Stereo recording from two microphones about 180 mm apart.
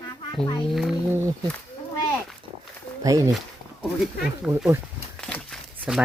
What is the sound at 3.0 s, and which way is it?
Speech, 20° right (ahead or behind).